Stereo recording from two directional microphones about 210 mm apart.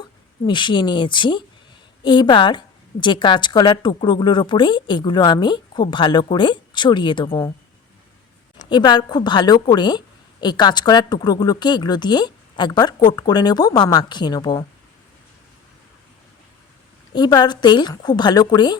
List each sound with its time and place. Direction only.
0.4 s a woman's voice: 20° left (ahead or behind)
8.7 s a woman's voice: 20° left (ahead or behind)
17.1 s a woman's voice: 20° left (ahead or behind)